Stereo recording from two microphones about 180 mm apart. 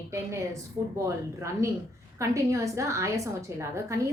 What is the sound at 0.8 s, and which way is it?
Speech, 15° right (ahead or behind).